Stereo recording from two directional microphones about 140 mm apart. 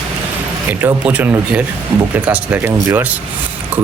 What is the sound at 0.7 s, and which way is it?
Speech, 15° right (ahead or behind).